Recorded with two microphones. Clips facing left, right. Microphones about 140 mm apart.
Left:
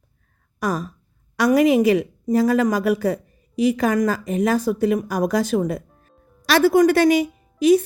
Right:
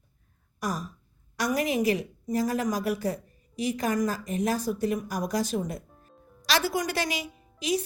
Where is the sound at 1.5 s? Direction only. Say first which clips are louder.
Left 10 dB; 90° left.